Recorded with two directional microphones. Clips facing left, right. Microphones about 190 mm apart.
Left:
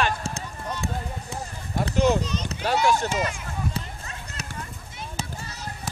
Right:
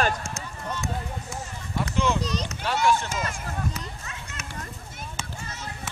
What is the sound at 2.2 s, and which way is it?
Speech, 35° right (ahead or behind).